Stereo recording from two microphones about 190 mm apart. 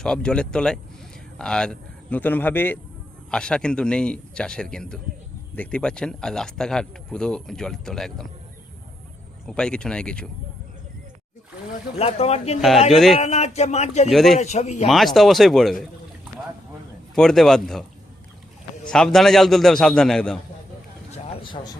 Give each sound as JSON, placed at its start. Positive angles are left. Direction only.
{"t": 0.0, "sound": "speech", "side_deg": 5}
{"t": 9.5, "sound": "speech", "side_deg": 5}
{"t": 11.9, "sound": "speech", "side_deg": 30}
{"t": 12.9, "sound": "speech", "side_deg": 0}
{"t": 13.1, "sound": "speech", "side_deg": 35}
{"t": 14.1, "sound": "speech", "side_deg": 0}
{"t": 14.3, "sound": "speech", "side_deg": 35}
{"t": 14.8, "sound": "speech", "side_deg": 0}
{"t": 17.2, "sound": "speech", "side_deg": 0}
{"t": 18.9, "sound": "speech", "side_deg": 0}
{"t": 21.1, "sound": "a sound", "side_deg": 25}